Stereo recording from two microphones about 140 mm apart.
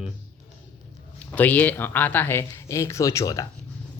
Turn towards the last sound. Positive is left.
turn(degrees=25)  # may be behind; listen again after turning